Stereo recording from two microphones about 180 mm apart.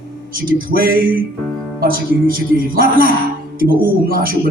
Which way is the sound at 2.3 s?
55° right (ahead or behind).